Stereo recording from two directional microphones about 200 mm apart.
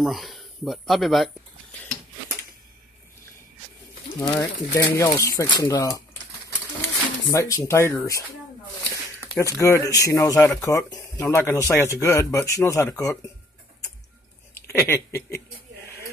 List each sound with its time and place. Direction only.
0.0 s speech: centre (ahead or behind)
4.2 s speech: 20° left (ahead or behind)
7.2 s speech: 15° left (ahead or behind)
9.3 s speech: 15° left (ahead or behind)
14.5 s speech: 10° left (ahead or behind)